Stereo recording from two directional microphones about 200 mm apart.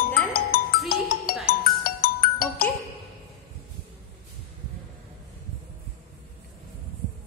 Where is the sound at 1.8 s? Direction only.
45° left (ahead or behind).